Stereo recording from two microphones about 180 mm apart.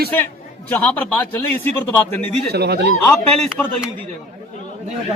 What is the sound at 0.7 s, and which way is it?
Speech, 10° left (ahead or behind).